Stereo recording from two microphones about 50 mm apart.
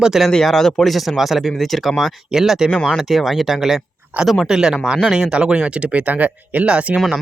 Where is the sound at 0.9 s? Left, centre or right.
Centre.